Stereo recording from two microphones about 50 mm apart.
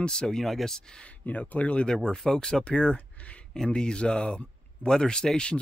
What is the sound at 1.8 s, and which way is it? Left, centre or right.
Speech, centre.